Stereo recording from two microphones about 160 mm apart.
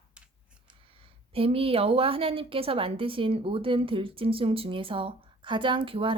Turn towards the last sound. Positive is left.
turn(degrees=-35)  # may be behind; listen again after turning